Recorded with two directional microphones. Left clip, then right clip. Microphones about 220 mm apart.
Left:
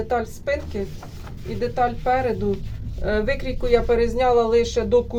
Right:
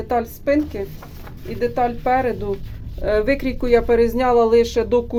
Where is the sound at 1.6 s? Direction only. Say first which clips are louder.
Right 2 dB; 50° right (ahead or behind).